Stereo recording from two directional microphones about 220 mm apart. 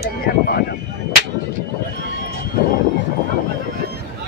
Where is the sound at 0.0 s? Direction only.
45° left (ahead or behind).